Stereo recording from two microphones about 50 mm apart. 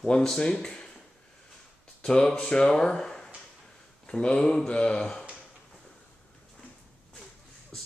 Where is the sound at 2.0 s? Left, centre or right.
Centre.